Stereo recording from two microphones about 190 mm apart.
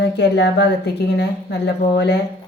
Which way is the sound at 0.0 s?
65° left (ahead or behind).